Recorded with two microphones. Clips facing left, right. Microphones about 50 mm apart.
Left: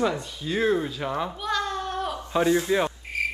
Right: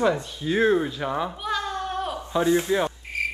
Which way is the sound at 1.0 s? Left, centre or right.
Centre.